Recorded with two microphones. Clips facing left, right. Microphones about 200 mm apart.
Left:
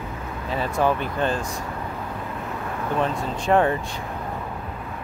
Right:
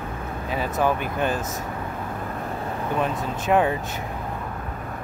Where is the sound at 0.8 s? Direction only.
10° right (ahead or behind).